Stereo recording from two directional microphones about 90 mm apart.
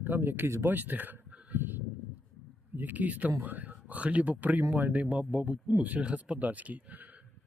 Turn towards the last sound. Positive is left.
turn(degrees=-15)  # may be behind; listen again after turning